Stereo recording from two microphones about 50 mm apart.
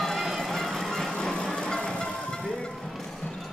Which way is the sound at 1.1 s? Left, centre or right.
Centre.